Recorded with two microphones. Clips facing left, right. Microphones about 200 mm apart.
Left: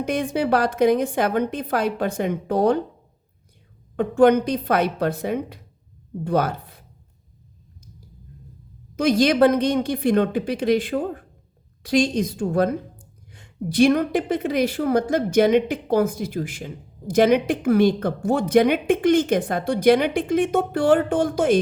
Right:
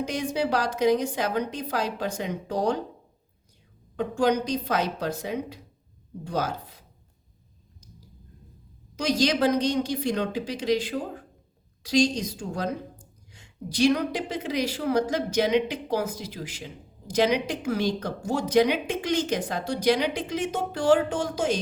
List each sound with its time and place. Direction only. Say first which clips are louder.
0.0 s a woman's voice: left 4 dB; 55° left (ahead or behind)
3.9 s a woman's voice: left 8 dB; 60° left (ahead or behind)
9.0 s a woman's voice: left 7 dB; 55° left (ahead or behind)